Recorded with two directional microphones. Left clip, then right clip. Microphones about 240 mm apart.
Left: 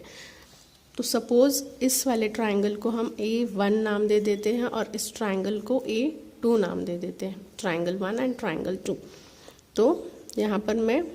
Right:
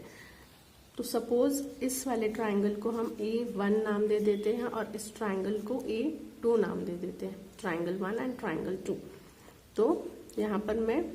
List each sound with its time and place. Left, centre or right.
0.9 s a woman's voice: left
10.3 s a woman's voice: left